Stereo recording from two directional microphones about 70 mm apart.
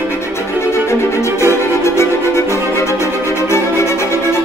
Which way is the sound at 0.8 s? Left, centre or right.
Left.